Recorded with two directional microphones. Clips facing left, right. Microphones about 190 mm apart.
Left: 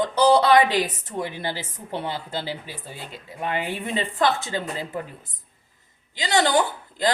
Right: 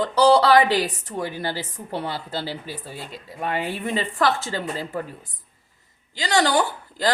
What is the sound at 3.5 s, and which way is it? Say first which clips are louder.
Speech: right 1 dB; 40° right (ahead or behind).